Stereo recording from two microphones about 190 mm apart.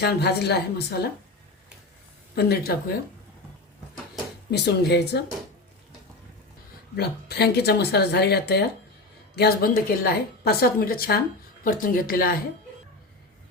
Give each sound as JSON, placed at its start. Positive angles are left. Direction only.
{"t": 0.0, "sound": "speech", "side_deg": 60}
{"t": 2.3, "sound": "speech", "side_deg": 55}
{"t": 4.5, "sound": "speech", "side_deg": 60}
{"t": 6.9, "sound": "a woman's voice", "side_deg": 60}